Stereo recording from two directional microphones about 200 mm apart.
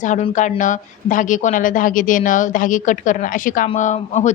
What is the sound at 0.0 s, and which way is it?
Speech, 40° left (ahead or behind).